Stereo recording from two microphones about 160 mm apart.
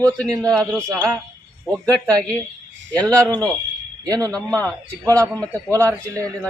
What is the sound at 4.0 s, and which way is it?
Speech, 20° right (ahead or behind).